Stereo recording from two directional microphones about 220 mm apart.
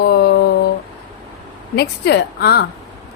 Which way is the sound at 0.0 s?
45° left (ahead or behind).